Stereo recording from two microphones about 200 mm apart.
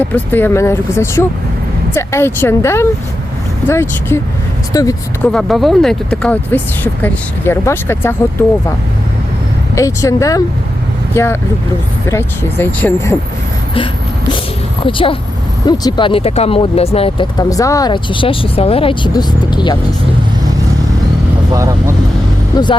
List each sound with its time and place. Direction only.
0.0 s speech: 10° left (ahead or behind)
5.3 s speech: centre (ahead or behind)
9.7 s speech: 15° left (ahead or behind)
14.8 s speech: 25° left (ahead or behind)
21.5 s speech: 15° right (ahead or behind)